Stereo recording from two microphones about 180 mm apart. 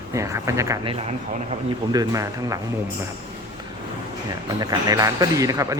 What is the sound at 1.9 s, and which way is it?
Speech, 20° right (ahead or behind).